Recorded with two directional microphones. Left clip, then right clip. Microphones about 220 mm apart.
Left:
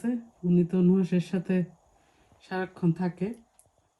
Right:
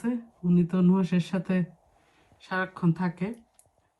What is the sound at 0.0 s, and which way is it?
Speech, 20° right (ahead or behind).